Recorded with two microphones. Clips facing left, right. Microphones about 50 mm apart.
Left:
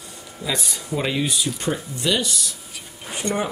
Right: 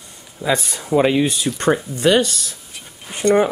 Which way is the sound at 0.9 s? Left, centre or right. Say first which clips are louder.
Right 10 dB; right.